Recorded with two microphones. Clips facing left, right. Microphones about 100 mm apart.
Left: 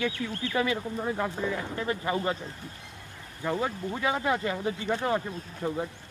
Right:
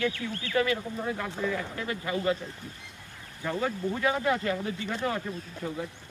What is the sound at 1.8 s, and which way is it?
Speech, 30° left (ahead or behind).